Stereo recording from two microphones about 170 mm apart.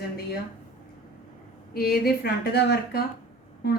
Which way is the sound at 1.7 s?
65° left (ahead or behind).